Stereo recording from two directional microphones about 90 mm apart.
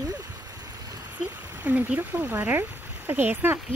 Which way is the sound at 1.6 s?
15° right (ahead or behind).